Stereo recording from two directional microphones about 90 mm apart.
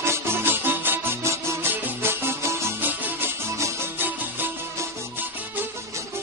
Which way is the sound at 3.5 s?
30° right (ahead or behind).